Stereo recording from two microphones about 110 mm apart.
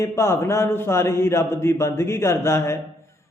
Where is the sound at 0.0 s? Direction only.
25° left (ahead or behind).